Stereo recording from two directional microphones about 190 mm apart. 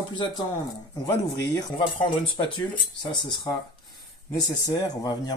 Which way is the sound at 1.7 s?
25° left (ahead or behind).